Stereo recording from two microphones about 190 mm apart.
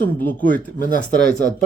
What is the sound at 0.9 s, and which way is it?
Speech, 40° left (ahead or behind).